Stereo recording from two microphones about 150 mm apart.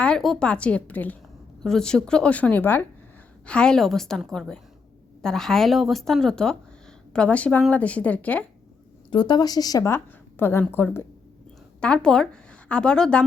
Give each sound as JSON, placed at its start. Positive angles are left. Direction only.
{"t": 0.0, "sound": "a woman's voice", "side_deg": 5}
{"t": 9.0, "sound": "a woman's voice", "side_deg": 30}